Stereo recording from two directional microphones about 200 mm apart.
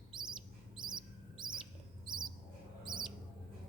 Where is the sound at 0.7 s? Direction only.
20° right (ahead or behind).